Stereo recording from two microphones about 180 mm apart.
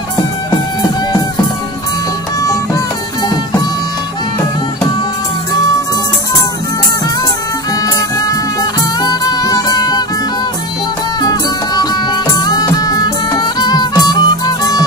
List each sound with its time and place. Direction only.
9.0 s music: 20° left (ahead or behind)
11.1 s music: 20° left (ahead or behind)